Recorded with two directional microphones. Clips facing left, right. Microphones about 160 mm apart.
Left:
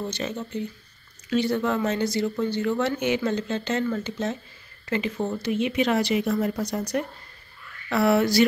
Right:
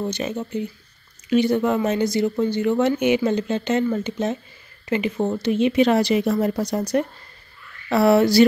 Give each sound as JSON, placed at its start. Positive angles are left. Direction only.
{"t": 0.0, "sound": "speech", "side_deg": -15}